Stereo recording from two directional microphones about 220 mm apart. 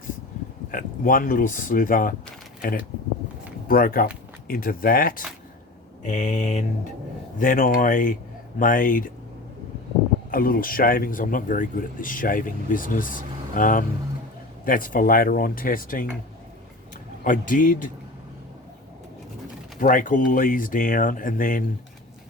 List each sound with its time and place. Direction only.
0.7 s speech: 40° left (ahead or behind)
10.3 s speech: 40° left (ahead or behind)
17.2 s speech: 40° left (ahead or behind)
19.8 s speech: 35° left (ahead or behind)